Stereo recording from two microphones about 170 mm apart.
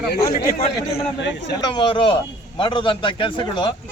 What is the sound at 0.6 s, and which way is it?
A man's voice, 35° left (ahead or behind).